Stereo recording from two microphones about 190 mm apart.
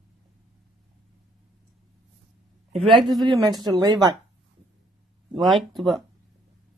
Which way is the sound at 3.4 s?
20° right (ahead or behind).